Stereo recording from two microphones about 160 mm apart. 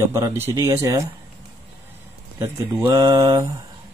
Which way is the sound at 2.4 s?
20° right (ahead or behind).